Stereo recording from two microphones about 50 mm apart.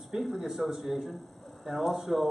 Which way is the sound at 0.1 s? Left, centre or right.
Centre.